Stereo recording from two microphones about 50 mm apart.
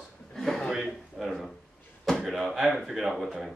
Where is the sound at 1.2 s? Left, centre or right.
Centre.